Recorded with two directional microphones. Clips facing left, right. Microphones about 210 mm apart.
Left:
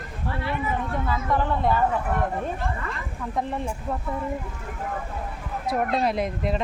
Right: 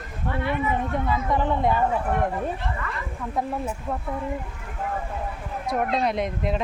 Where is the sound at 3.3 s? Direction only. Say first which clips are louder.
Right 1 dB; 5° right (ahead or behind).